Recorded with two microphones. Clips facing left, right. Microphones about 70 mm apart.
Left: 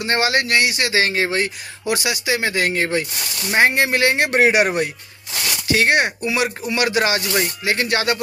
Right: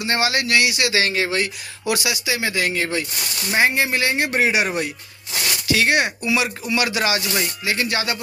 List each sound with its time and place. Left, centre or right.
0.0 s speech: left
1.9 s speech: left
3.5 s speech: left
5.6 s speech: left